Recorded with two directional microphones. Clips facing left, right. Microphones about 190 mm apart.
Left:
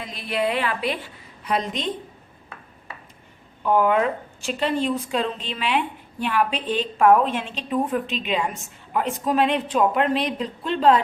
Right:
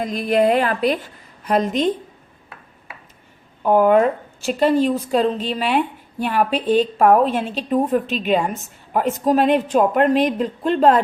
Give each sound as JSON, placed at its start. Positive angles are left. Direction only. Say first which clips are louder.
{"t": 0.0, "sound": "a woman's voice", "louder": "right 8 dB", "side_deg": -45}
{"t": 3.6, "sound": "a woman's voice", "louder": "right 5 dB", "side_deg": -45}